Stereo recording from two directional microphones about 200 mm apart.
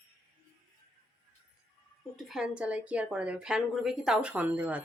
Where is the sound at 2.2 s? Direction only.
Centre (ahead or behind).